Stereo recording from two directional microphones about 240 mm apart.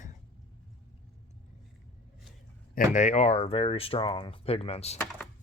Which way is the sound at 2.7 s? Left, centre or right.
Left.